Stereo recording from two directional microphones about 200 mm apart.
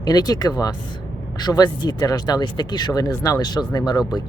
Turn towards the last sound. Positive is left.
turn(degrees=20)  # may be behind; listen again after turning